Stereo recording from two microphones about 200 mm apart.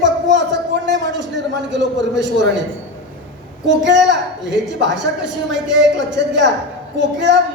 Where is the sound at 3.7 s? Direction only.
65° right (ahead or behind).